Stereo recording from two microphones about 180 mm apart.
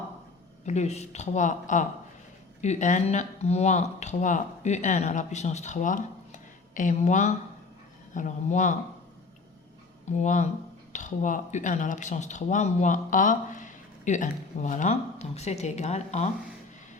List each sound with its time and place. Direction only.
0.6 s speech: 40° left (ahead or behind)
10.1 s speech: 40° left (ahead or behind)